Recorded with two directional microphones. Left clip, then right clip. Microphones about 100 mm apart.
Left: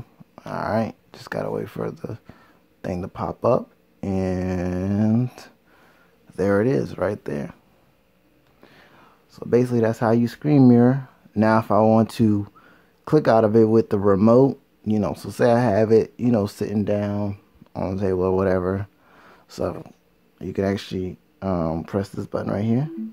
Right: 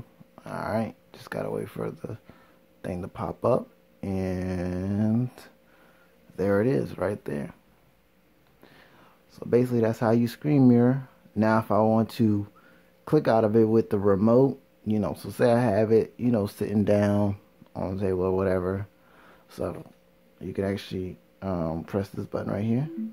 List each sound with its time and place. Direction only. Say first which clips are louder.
0.4 s speech: left 6 dB; 25° left (ahead or behind)
8.6 s speech: left 4 dB; 15° left (ahead or behind)
16.7 s speech: right 3 dB; 5° right (ahead or behind)
17.7 s speech: left 4 dB; 25° left (ahead or behind)